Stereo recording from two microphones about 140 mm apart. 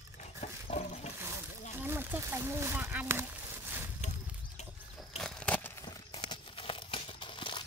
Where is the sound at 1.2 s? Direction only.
15° right (ahead or behind).